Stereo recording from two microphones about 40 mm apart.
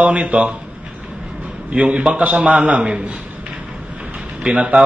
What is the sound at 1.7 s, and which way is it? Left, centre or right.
A man's voice, right.